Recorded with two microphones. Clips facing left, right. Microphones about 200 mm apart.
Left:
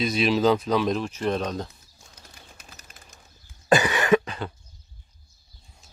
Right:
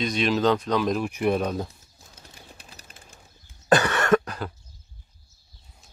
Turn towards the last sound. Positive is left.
turn(degrees=0)  # may be behind; listen again after turning